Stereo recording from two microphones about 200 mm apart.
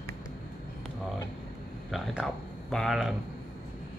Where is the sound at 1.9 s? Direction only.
Centre (ahead or behind).